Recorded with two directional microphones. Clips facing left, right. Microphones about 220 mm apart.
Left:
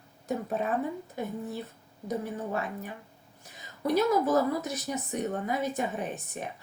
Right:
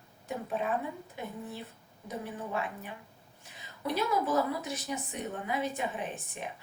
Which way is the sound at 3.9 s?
40° left (ahead or behind).